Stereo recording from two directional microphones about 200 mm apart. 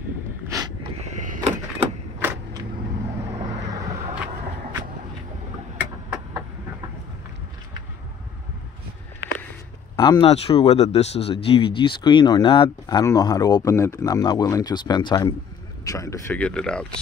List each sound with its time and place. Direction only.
0.5 s a sound: 15° right (ahead or behind)
1.0 s door: 35° right (ahead or behind)
9.9 s speech: 20° left (ahead or behind); by 16.8 s 5° left (ahead or behind)